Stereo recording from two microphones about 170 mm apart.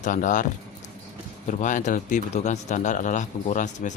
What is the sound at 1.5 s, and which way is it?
Speech, 50° left (ahead or behind).